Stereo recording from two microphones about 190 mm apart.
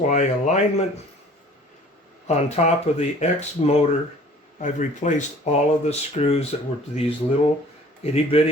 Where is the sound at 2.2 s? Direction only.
35° left (ahead or behind).